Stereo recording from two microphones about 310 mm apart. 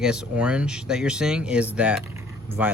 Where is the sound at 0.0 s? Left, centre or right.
Centre.